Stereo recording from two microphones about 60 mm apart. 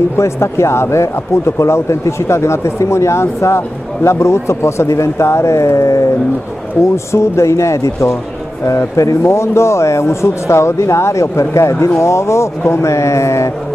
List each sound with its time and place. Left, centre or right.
0.2 s speech: left